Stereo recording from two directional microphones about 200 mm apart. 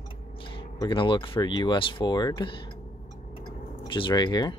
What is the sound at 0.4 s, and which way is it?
Speech, 25° left (ahead or behind).